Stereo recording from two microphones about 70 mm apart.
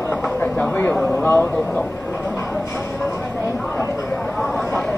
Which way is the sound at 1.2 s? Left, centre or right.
Left.